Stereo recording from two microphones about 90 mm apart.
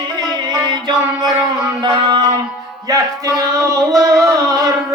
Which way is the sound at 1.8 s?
60° right (ahead or behind).